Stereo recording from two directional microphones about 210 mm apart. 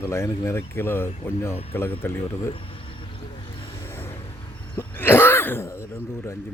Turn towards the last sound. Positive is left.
turn(degrees=10)  # may be behind; listen again after turning